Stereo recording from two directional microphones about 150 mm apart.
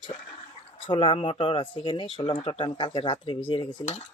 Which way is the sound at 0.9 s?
35° left (ahead or behind).